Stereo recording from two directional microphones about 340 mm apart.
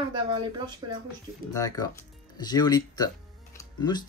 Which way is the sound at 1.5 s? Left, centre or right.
Centre.